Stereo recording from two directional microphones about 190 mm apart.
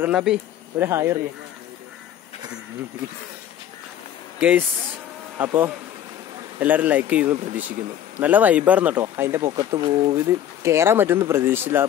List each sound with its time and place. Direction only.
0.0 s speech: 5° right (ahead or behind)
0.8 s speech: 15° right (ahead or behind)
4.4 s speech: 5° right (ahead or behind)